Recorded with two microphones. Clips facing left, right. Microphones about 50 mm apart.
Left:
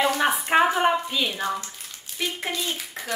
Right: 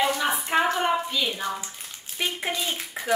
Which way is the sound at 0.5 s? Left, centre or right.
Centre.